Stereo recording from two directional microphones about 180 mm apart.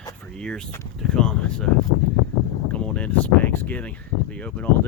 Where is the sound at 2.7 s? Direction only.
5° left (ahead or behind).